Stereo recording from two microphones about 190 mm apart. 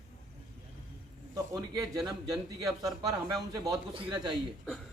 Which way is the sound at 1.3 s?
20° right (ahead or behind).